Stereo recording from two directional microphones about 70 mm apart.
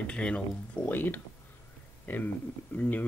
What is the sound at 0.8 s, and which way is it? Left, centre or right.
Speech, left.